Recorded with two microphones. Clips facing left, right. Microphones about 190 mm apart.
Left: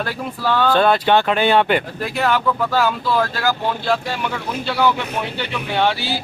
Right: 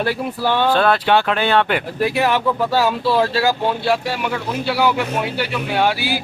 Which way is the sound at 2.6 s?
30° right (ahead or behind).